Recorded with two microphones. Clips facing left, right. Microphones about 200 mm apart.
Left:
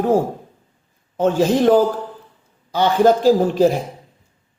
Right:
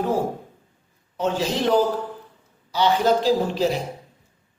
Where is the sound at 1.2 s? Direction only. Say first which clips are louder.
Left 8 dB; 50° left (ahead or behind).